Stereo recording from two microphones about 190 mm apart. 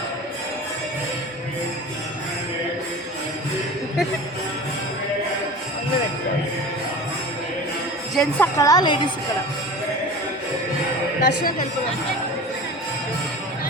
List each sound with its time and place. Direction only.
8.1 s speech: 5° left (ahead or behind)
8.5 s a woman's voice: 20° left (ahead or behind)
11.2 s speech: 65° left (ahead or behind)